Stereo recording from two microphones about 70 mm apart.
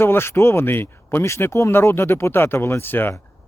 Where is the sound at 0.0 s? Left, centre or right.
Left.